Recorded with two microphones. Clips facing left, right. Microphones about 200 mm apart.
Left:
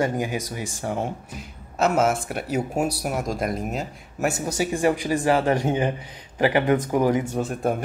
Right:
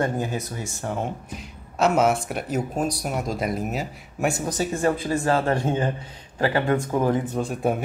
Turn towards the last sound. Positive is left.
turn(degrees=0)  # may be behind; listen again after turning